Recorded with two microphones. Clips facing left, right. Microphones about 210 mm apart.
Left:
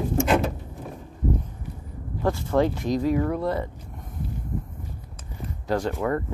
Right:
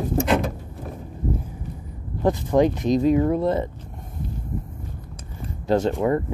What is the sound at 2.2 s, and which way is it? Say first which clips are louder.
Speech: right 4 dB; 20° right (ahead or behind).